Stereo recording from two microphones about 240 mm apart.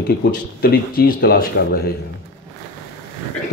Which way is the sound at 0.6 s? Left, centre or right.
Left.